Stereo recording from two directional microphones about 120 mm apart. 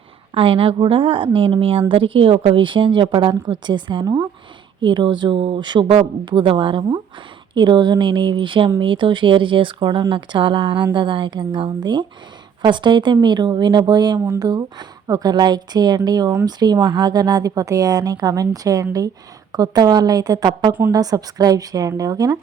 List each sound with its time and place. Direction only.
0.3 s a woman's voice: 50° right (ahead or behind); by 22.4 s 30° right (ahead or behind)